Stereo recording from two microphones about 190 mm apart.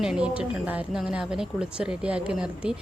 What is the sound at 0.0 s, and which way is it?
Speech, 5° right (ahead or behind).